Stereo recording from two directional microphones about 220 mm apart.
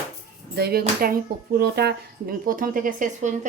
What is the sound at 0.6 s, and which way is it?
Speech, 45° right (ahead or behind).